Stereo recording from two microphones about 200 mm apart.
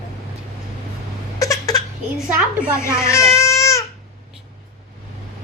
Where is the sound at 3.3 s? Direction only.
15° left (ahead or behind).